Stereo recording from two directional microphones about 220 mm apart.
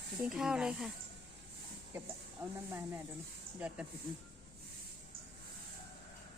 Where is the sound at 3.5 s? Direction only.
5° right (ahead or behind).